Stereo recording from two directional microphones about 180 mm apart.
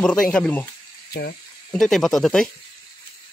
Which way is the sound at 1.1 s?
60° left (ahead or behind).